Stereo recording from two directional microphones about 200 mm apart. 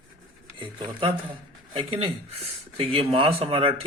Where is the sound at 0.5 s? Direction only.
25° right (ahead or behind).